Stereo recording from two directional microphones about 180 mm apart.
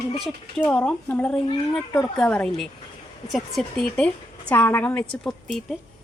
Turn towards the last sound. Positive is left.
turn(degrees=0)  # may be behind; listen again after turning